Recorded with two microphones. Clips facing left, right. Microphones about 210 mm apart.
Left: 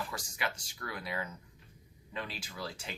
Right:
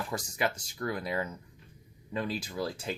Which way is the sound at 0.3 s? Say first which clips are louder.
Right 7 dB; 45° right (ahead or behind).